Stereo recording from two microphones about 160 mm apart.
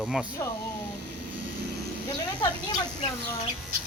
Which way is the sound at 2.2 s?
25° left (ahead or behind).